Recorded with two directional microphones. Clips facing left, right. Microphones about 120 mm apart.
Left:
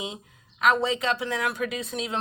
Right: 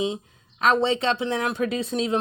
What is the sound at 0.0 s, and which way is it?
Speech, 30° right (ahead or behind).